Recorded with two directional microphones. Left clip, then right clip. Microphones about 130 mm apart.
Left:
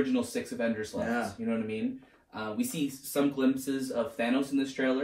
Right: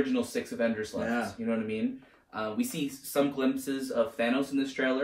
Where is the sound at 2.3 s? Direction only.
20° right (ahead or behind).